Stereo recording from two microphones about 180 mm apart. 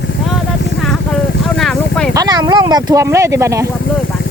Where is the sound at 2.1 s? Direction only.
20° right (ahead or behind).